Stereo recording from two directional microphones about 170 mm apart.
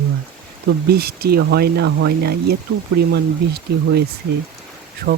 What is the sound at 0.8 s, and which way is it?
Speech, 65° right (ahead or behind).